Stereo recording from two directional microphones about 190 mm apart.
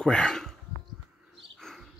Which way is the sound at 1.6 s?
Centre (ahead or behind).